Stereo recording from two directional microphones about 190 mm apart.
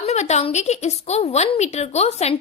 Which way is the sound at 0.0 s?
35° left (ahead or behind).